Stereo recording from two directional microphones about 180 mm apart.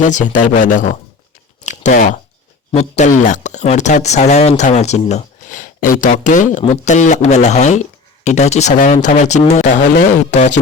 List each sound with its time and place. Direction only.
0.0 s speech: 45° left (ahead or behind)
1.6 s a sound: 45° left (ahead or behind)
2.7 s speech: 40° left (ahead or behind)